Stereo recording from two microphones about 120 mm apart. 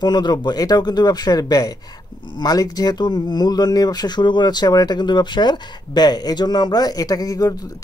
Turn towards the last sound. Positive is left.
turn(degrees=30)  # may be behind; listen again after turning